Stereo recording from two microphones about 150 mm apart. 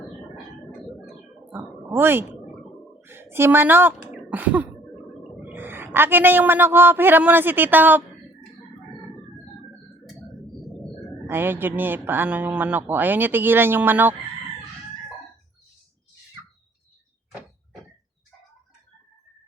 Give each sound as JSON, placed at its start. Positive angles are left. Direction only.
{"t": 0.7, "sound": "a sound", "side_deg": 0}
{"t": 1.5, "sound": "a woman's voice", "side_deg": -15}
{"t": 11.3, "sound": "speech", "side_deg": -15}